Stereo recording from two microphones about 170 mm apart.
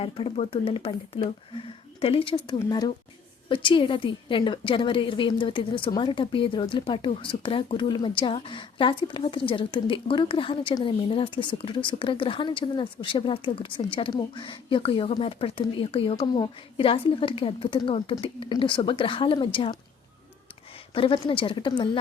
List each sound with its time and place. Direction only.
0.0 s a woman's voice: 35° left (ahead or behind)
20.9 s a woman's voice: 30° left (ahead or behind)